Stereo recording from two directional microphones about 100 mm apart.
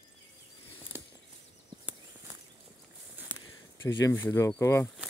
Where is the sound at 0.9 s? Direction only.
25° right (ahead or behind).